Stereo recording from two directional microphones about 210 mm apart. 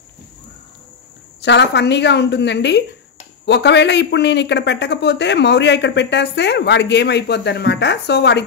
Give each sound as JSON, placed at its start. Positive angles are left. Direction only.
{"t": 1.4, "sound": "a man's voice", "side_deg": 55}